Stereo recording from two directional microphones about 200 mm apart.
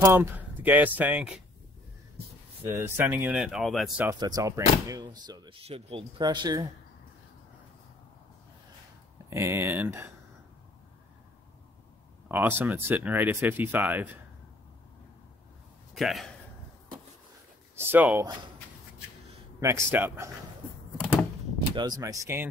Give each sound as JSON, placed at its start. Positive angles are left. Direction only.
{"t": 0.0, "sound": "speech", "side_deg": -10}
{"t": 2.6, "sound": "speech", "side_deg": -10}
{"t": 4.0, "sound": "speech", "side_deg": -20}
{"t": 9.3, "sound": "speech", "side_deg": -10}
{"t": 12.3, "sound": "speech", "side_deg": -10}
{"t": 15.9, "sound": "speech", "side_deg": 0}
{"t": 17.7, "sound": "speech", "side_deg": -10}
{"t": 19.6, "sound": "speech", "side_deg": -15}
{"t": 21.7, "sound": "speech", "side_deg": -20}